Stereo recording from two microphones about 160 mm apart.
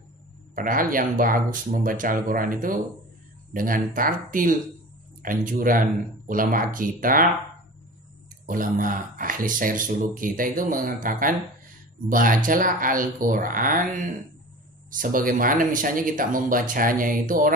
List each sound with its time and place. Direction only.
0.6 s speech: 60° right (ahead or behind)
8.5 s speech: 60° right (ahead or behind)